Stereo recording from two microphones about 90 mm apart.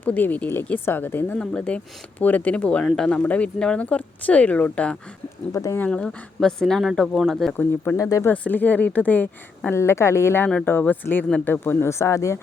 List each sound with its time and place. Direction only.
0.0 s speech: 20° left (ahead or behind)
1.4 s speech: 10° left (ahead or behind)
5.5 s speech: 25° left (ahead or behind)
5.9 s speech: 10° left (ahead or behind)
7.9 s speech: 35° left (ahead or behind)
8.3 s speech: 20° left (ahead or behind)
9.6 s speech: 30° left (ahead or behind)